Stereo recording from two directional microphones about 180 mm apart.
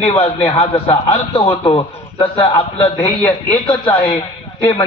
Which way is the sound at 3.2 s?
10° left (ahead or behind).